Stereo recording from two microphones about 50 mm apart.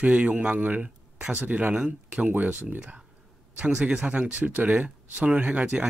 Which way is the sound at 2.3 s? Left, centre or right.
Right.